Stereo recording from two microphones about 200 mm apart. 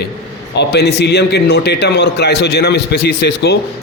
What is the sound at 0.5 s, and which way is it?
A man's voice, 60° left (ahead or behind).